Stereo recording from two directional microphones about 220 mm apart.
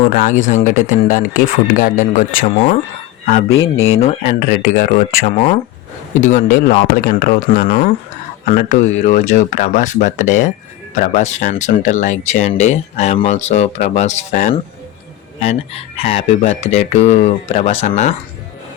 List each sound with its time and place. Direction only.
0.1 s speech: 35° left (ahead or behind)
3.8 s speech: 30° left (ahead or behind)
4.3 s speech: 40° left (ahead or behind)